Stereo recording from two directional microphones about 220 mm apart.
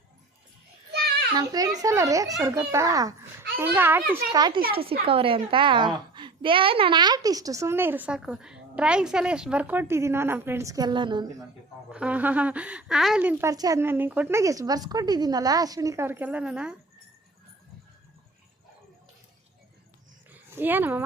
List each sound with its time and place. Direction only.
0.9 s a sound: 50° right (ahead or behind)
1.4 s a woman's voice: 15° right (ahead or behind)
11.9 s a woman's voice: 5° right (ahead or behind)
20.3 s speech: 10° right (ahead or behind)